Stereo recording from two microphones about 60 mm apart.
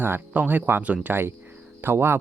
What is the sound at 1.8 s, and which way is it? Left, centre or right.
Speech, right.